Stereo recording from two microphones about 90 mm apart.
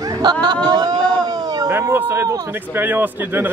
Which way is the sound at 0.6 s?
45° right (ahead or behind).